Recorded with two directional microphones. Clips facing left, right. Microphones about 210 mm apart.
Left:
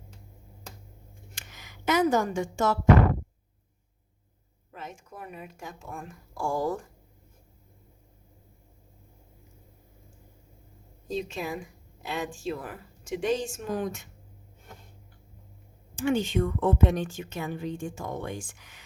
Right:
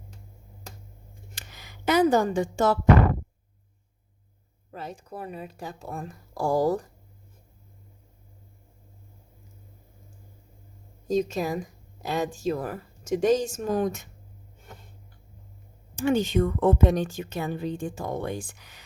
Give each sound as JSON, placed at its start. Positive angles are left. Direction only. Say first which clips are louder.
{"t": 1.4, "sound": "speech", "louder": "right 2 dB", "side_deg": -35}
{"t": 4.7, "sound": "a woman's voice", "louder": "right 5 dB", "side_deg": -35}
{"t": 11.1, "sound": "a woman's voice", "louder": "right 7 dB", "side_deg": -40}
{"t": 16.0, "sound": "a woman's voice", "louder": "right 3 dB", "side_deg": -40}